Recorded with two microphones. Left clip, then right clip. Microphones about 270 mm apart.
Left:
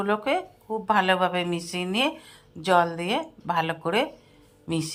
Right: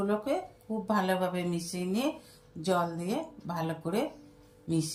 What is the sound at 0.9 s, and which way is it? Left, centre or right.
A woman's voice, centre.